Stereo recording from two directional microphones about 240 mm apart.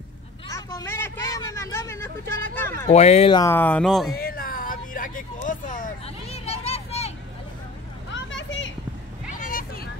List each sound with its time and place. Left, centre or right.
0.5 s speech: centre
2.9 s speech: left; by 4.1 s centre
4.1 s vehicle: left
8.1 s children playing: left
9.3 s a sound: left